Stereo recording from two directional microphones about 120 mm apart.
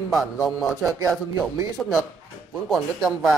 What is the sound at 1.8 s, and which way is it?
Speech, 5° left (ahead or behind).